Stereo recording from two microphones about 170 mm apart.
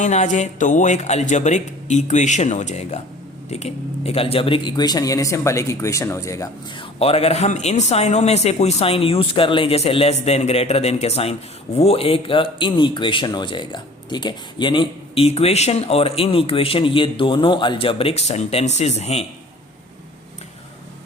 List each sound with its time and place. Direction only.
0.0 s speech: 45° left (ahead or behind); by 6.5 s 20° left (ahead or behind)
6.7 s speech: 35° left (ahead or behind)